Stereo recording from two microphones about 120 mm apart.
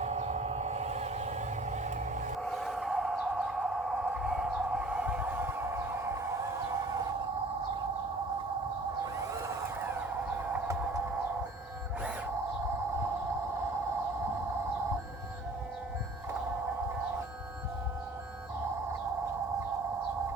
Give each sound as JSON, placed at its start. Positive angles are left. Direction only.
{"t": 0.0, "sound": "vehicle", "side_deg": -65}
{"t": 2.4, "sound": "a sound", "side_deg": 0}
{"t": 4.1, "sound": "train", "side_deg": -5}
{"t": 9.1, "sound": "vehicle", "side_deg": -25}